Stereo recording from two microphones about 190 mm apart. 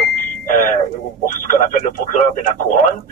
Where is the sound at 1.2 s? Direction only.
45° left (ahead or behind).